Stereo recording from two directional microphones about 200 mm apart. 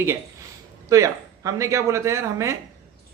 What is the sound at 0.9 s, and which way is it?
A man's voice, 15° right (ahead or behind).